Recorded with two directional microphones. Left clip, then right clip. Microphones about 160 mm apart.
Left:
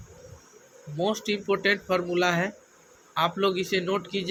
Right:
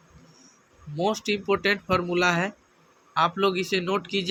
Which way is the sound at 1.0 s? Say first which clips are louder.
Right 2 dB; 25° right (ahead or behind).